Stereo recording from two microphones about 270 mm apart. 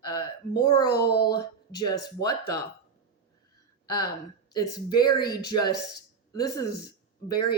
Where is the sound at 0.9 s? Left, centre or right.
Left.